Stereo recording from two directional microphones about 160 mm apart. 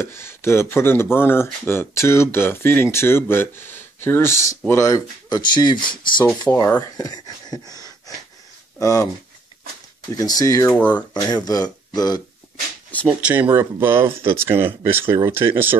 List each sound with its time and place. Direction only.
0.0 s speech: 15° left (ahead or behind)
6.5 s speech: 15° left (ahead or behind)
10.1 s speech: 20° left (ahead or behind)
10.7 s speech: 10° left (ahead or behind)
11.1 s speech: 25° left (ahead or behind)
13.2 s speech: 10° right (ahead or behind)